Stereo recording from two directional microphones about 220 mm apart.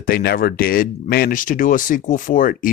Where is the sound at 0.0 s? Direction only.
45° left (ahead or behind).